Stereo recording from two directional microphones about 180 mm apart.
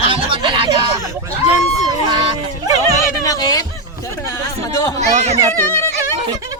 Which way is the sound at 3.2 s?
20° left (ahead or behind).